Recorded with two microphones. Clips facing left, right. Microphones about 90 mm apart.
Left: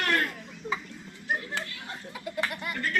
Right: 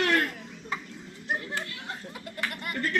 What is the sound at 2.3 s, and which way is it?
Bird, 15° left (ahead or behind).